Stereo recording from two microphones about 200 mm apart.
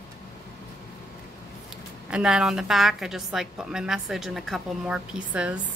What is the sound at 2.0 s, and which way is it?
Speech, 5° right (ahead or behind).